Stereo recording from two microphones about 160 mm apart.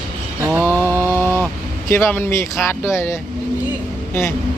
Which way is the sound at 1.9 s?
15° left (ahead or behind).